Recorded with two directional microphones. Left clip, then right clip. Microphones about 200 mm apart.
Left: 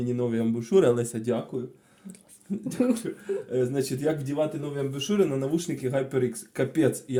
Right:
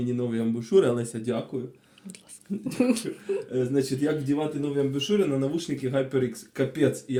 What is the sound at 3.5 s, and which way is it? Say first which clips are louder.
Speech: even; 40° left (ahead or behind).